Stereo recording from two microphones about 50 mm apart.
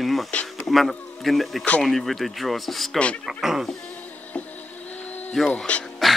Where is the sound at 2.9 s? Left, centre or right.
Left.